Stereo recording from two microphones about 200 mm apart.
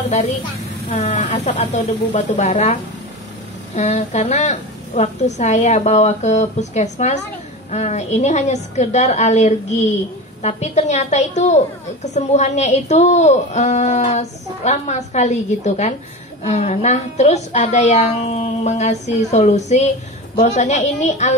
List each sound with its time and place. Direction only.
0.8 s a woman's voice: 30° left (ahead or behind)